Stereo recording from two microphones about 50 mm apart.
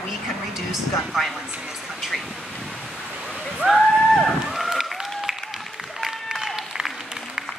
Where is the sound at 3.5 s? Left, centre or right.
Centre.